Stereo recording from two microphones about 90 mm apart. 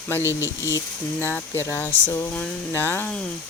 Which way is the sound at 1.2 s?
25° left (ahead or behind).